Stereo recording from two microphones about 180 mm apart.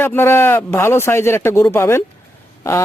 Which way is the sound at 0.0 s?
10° left (ahead or behind).